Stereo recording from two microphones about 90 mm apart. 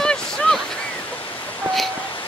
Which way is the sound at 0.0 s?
10° left (ahead or behind).